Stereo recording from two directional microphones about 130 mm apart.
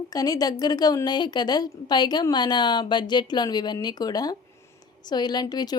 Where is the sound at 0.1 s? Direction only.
30° left (ahead or behind).